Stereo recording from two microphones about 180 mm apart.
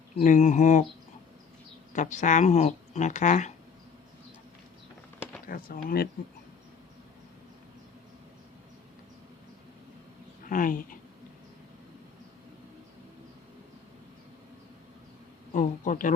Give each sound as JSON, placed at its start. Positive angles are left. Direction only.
{"t": 0.2, "sound": "speech", "side_deg": 45}
{"t": 1.9, "sound": "speech", "side_deg": 45}
{"t": 5.5, "sound": "speech", "side_deg": 55}
{"t": 10.4, "sound": "speech", "side_deg": 50}
{"t": 15.5, "sound": "speech", "side_deg": 45}